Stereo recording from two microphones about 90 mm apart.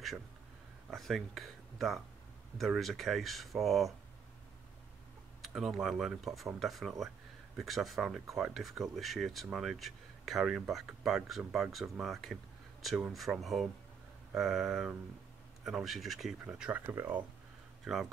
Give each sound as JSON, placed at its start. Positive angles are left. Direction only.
{"t": 0.8, "sound": "speech", "side_deg": 0}
{"t": 5.4, "sound": "speech", "side_deg": -5}
{"t": 16.4, "sound": "speech", "side_deg": -15}
{"t": 17.9, "sound": "speech", "side_deg": -5}